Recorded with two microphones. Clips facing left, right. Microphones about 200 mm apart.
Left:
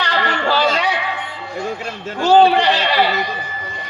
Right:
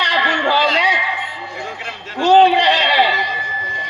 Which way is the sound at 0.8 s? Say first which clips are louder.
Even; 15° right (ahead or behind).